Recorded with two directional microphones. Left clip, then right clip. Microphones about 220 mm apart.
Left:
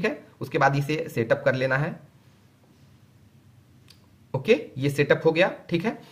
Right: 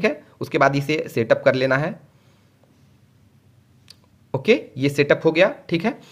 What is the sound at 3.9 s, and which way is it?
Speech, 40° right (ahead or behind).